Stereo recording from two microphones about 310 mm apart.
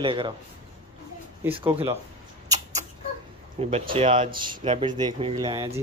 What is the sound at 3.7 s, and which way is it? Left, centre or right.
Speech, centre.